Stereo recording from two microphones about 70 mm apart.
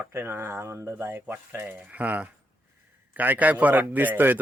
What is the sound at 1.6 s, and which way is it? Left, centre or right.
Speech, centre.